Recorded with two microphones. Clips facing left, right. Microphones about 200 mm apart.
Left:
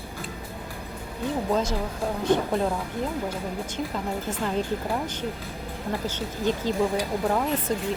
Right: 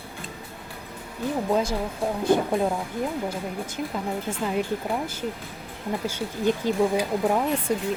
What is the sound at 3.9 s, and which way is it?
Speech, 10° right (ahead or behind).